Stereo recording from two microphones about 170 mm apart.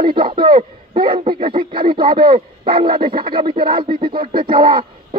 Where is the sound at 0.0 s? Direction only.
30° right (ahead or behind).